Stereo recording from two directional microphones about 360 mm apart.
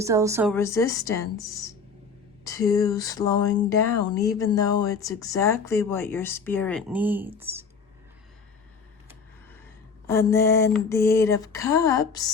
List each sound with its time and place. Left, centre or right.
0.0 s speech: centre
0.5 s speech: centre
10.1 s speech: centre